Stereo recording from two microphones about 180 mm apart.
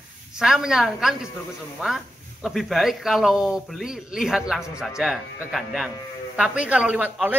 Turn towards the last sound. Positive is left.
turn(degrees=-5)  # may be behind; listen again after turning